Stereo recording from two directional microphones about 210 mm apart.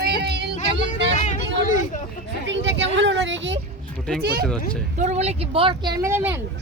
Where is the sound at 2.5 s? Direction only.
60° right (ahead or behind).